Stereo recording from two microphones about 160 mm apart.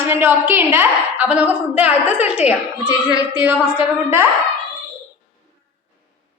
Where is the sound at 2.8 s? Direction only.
25° left (ahead or behind).